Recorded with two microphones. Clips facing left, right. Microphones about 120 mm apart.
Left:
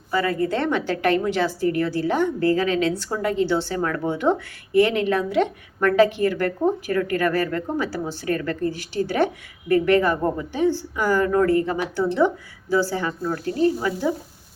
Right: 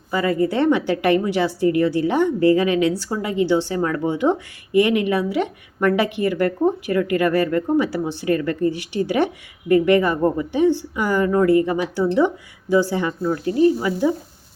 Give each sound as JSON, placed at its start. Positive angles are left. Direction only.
{"t": 0.1, "sound": "speech", "side_deg": -15}